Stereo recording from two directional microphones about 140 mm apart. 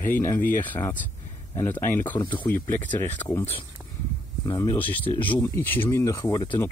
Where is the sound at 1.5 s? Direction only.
15° left (ahead or behind).